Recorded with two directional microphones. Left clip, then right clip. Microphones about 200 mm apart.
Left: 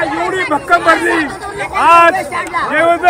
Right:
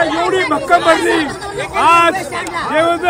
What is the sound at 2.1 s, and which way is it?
Speech, 20° left (ahead or behind).